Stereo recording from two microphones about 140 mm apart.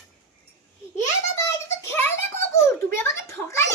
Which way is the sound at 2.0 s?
15° left (ahead or behind).